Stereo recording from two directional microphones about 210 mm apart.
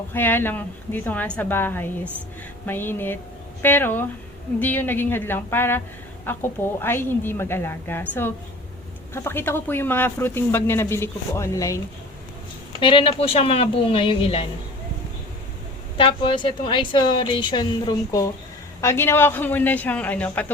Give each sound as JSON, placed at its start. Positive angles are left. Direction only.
{"t": 0.1, "sound": "speech", "side_deg": 10}
{"t": 12.8, "sound": "a woman's voice", "side_deg": 25}
{"t": 16.0, "sound": "a woman's voice", "side_deg": 25}